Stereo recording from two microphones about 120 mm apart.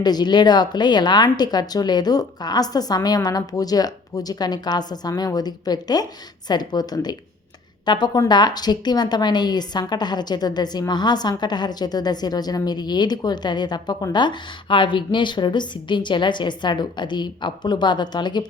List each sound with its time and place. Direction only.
0.0 s a woman's voice: 35° left (ahead or behind)